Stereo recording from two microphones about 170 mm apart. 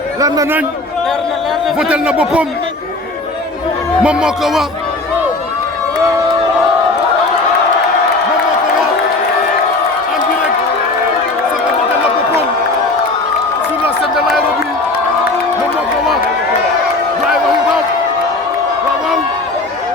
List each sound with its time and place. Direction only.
0.2 s speech: 20° right (ahead or behind)
1.6 s speech: 5° right (ahead or behind)
4.0 s speech: 5° right (ahead or behind)